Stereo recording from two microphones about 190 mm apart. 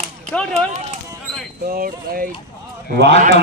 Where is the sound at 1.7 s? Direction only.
50° right (ahead or behind).